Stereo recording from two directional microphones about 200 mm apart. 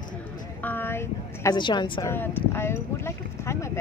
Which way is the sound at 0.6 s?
10° left (ahead or behind).